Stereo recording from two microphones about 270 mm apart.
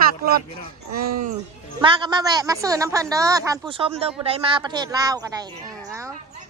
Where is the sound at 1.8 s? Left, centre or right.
Centre.